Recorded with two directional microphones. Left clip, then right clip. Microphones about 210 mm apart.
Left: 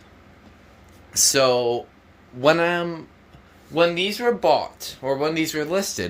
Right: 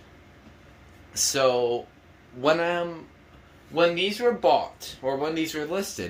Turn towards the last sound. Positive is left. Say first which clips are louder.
# left 6 dB
turn(degrees=45)  # may be behind; listen again after turning